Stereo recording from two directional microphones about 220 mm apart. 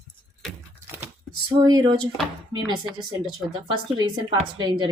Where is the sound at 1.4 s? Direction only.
20° right (ahead or behind).